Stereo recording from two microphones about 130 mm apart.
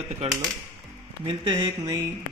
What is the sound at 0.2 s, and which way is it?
Speech, 55° right (ahead or behind).